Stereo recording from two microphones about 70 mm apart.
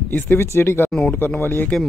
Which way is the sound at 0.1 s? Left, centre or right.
Left.